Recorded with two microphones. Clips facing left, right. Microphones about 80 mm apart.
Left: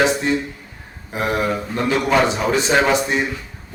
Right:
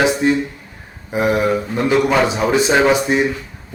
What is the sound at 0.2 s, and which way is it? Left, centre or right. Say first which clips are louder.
Speech: right 4 dB; centre.